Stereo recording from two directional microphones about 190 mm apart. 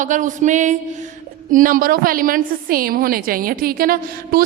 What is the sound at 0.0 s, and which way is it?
A woman's voice, 40° right (ahead or behind).